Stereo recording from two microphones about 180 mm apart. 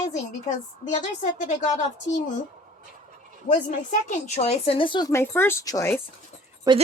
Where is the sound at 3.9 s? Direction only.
40° left (ahead or behind); by 5.1 s 25° left (ahead or behind).